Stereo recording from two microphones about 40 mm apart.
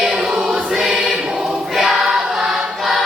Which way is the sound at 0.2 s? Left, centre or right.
Centre.